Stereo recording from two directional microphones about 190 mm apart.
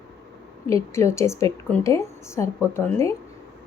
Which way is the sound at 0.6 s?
15° left (ahead or behind).